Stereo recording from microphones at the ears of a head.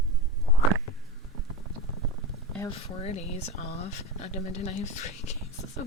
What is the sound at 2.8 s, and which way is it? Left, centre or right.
Speech, left.